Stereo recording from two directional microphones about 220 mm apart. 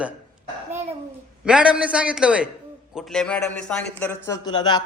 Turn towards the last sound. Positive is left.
turn(degrees=20)  # may be behind; listen again after turning